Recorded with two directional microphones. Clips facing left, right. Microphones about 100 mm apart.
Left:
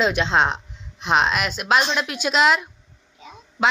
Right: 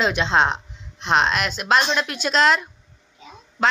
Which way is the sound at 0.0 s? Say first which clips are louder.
Even; 5° left (ahead or behind).